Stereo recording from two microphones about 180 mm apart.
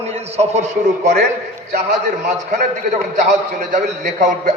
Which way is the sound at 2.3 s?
40° right (ahead or behind).